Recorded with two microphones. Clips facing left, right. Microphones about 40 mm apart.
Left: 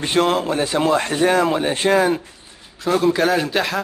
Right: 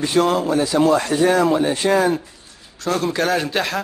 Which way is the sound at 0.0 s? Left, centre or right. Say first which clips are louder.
Right 1 dB; left.